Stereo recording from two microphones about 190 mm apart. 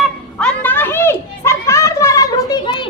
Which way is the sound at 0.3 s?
5° left (ahead or behind).